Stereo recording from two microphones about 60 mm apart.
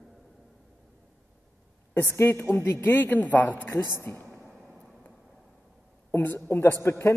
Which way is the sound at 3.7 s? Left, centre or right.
Left.